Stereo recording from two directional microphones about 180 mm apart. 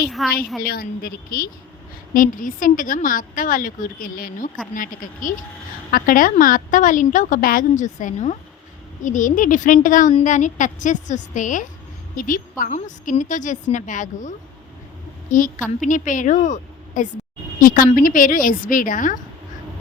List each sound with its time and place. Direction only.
0.1 s a woman's voice: centre (ahead or behind)
0.6 s a woman's voice: 55° left (ahead or behind)